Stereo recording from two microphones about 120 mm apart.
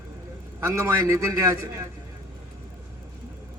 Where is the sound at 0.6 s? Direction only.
25° right (ahead or behind).